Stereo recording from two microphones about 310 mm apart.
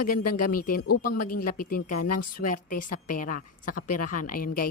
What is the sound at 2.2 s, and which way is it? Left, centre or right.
A woman's voice, left.